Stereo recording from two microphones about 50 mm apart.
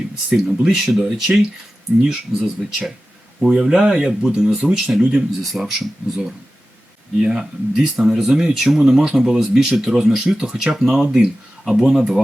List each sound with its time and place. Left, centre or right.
0.3 s speech: centre
5.4 s speech: centre